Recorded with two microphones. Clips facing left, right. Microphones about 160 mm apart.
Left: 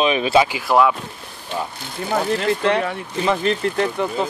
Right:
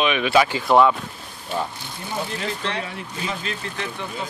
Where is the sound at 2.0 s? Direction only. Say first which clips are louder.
Left 9 dB; 65° left (ahead or behind).